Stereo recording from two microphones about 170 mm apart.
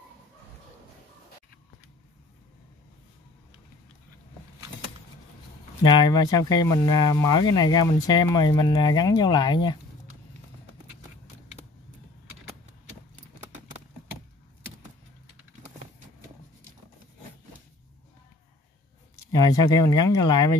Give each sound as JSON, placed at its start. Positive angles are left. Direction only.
{"t": 5.8, "sound": "speech", "side_deg": 25}
{"t": 19.3, "sound": "speech", "side_deg": 20}